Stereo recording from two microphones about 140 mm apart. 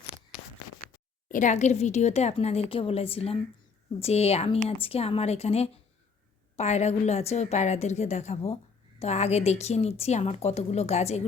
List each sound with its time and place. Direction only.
1.3 s a woman's voice: 65° left (ahead or behind)